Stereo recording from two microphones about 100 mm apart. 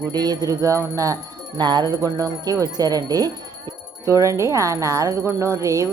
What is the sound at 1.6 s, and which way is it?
Speech, 50° right (ahead or behind).